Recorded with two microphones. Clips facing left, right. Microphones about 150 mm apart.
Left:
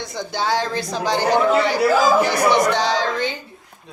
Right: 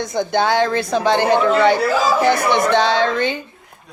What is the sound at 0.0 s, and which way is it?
Speech, 50° right (ahead or behind).